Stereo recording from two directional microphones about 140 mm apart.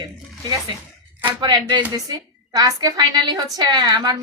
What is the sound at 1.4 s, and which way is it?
A woman's voice, 30° right (ahead or behind).